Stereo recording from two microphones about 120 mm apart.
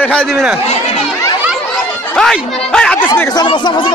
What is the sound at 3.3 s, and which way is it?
Speech, 40° left (ahead or behind).